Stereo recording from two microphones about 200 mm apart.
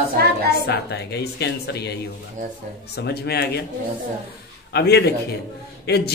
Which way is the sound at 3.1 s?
55° left (ahead or behind).